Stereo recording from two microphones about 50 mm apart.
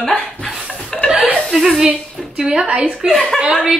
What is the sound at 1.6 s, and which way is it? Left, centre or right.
A woman's voice, centre.